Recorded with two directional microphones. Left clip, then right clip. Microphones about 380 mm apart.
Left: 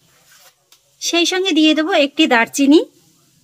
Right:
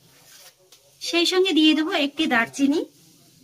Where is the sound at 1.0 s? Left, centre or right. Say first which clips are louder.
Left 4 dB; centre.